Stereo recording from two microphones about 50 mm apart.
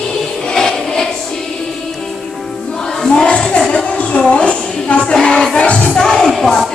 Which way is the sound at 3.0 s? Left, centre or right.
Centre.